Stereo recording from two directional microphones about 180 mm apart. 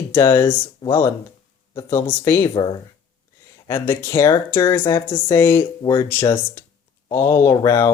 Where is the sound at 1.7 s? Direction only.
15° left (ahead or behind).